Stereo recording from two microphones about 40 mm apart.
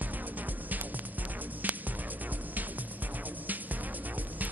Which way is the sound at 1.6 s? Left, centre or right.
Right.